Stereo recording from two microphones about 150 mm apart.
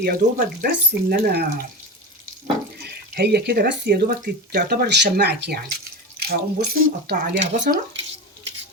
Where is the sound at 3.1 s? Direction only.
90° right.